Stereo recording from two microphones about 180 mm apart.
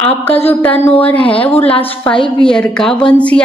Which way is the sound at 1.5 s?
35° left (ahead or behind).